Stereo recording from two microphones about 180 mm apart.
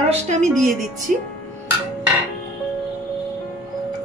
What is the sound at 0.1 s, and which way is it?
Speech, 40° right (ahead or behind).